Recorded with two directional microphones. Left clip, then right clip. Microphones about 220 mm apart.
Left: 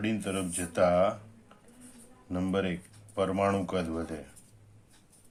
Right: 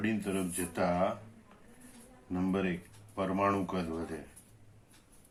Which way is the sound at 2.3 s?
45° left (ahead or behind).